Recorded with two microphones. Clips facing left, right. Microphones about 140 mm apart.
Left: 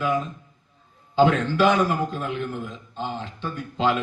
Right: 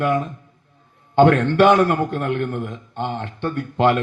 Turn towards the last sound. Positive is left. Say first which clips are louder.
# right 6 dB
turn(degrees=-60)  # may be behind; listen again after turning